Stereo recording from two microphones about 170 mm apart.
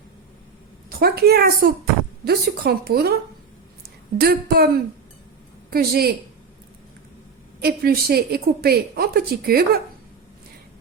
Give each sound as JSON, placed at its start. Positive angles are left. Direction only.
{"t": 0.9, "sound": "a woman's voice", "side_deg": -65}
{"t": 4.2, "sound": "a woman's voice", "side_deg": -65}
{"t": 5.7, "sound": "a woman's voice", "side_deg": -65}
{"t": 7.6, "sound": "a woman's voice", "side_deg": -65}